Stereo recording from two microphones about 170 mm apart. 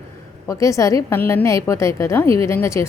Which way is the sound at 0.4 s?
20° left (ahead or behind).